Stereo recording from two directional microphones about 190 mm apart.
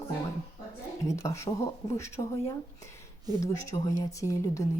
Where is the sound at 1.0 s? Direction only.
15° left (ahead or behind).